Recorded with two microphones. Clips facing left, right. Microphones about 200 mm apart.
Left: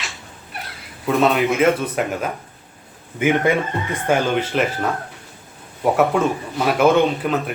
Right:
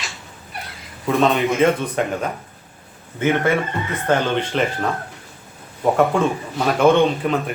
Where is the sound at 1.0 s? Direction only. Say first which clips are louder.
Even; 5° left (ahead or behind).